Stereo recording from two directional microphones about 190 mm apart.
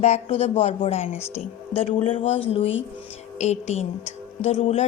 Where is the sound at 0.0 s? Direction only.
35° left (ahead or behind).